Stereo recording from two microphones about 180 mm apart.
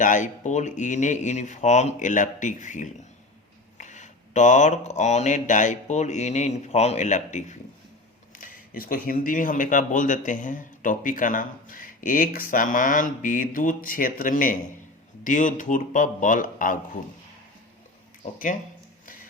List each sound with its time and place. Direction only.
0.0 s speech: 45° left (ahead or behind)
19.0 s printer: 50° left (ahead or behind)